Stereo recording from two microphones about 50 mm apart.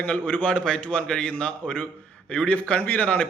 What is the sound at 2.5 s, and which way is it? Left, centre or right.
Speech, left.